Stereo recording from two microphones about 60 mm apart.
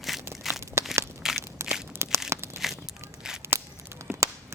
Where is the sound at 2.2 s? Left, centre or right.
Right.